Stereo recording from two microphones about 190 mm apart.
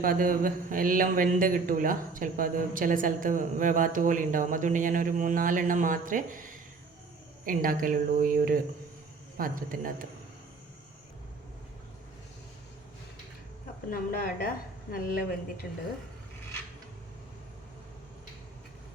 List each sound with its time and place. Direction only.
0.0 s a man's voice: 45° right (ahead or behind)
13.9 s a woman's voice: 50° left (ahead or behind)